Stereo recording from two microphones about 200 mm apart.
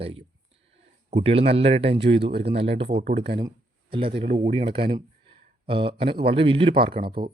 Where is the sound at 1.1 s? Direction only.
30° right (ahead or behind).